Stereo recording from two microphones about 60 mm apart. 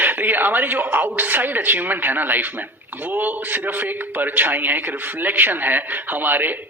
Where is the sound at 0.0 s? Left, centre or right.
Right.